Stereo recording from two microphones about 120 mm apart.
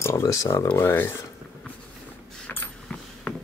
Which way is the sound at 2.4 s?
10° left (ahead or behind).